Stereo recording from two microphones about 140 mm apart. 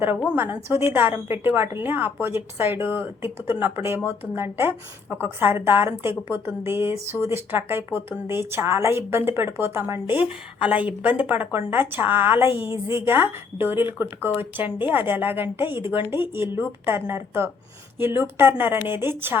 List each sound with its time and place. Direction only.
0.3 s speech: 15° right (ahead or behind)
12.6 s a woman's voice: 35° left (ahead or behind)
13.1 s speech: 15° right (ahead or behind)